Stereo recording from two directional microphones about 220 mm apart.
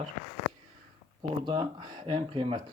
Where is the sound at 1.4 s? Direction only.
20° right (ahead or behind).